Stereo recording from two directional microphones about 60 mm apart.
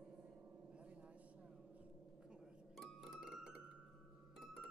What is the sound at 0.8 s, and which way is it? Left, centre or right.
Vehicle, right.